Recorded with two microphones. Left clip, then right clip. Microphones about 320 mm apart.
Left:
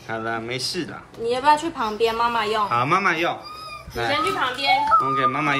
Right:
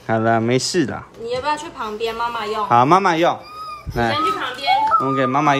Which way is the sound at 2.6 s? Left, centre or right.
Centre.